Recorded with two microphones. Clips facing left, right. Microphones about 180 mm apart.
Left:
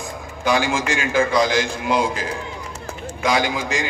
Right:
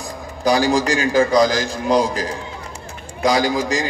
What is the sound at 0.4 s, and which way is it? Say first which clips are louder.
A man's voice: right 4 dB; 35° right (ahead or behind).